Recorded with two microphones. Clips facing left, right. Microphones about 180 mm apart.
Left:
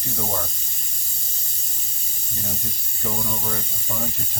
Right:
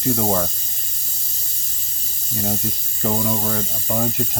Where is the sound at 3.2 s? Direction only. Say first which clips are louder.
Right 7 dB; 60° right (ahead or behind).